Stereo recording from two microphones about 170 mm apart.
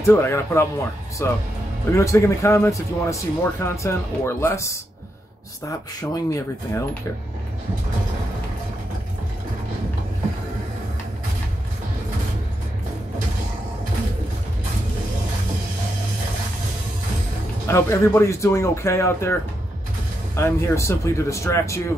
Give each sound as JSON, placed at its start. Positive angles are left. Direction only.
{"t": 0.0, "sound": "speech", "side_deg": 15}
{"t": 17.6, "sound": "speech", "side_deg": 15}
{"t": 20.3, "sound": "speech", "side_deg": 15}